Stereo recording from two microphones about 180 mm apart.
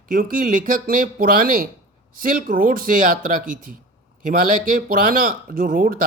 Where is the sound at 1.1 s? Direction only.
55° right (ahead or behind).